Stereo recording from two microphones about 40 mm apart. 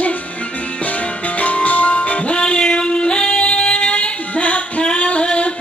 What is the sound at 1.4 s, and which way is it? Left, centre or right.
Music, left.